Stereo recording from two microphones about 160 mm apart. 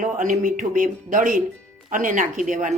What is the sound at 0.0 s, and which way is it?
Speech, 55° right (ahead or behind).